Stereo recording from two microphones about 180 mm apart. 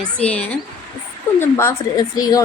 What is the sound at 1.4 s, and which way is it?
A woman's voice, 15° left (ahead or behind).